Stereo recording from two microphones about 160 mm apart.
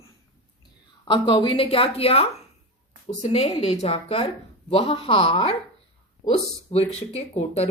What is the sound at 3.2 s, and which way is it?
Speech, 40° left (ahead or behind).